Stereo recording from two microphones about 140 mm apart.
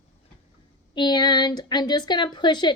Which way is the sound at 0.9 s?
30° left (ahead or behind).